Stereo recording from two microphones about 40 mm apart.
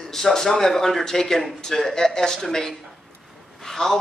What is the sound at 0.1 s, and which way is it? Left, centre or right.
A man's voice, centre.